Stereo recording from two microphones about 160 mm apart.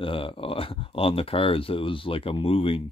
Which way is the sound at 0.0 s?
35° left (ahead or behind).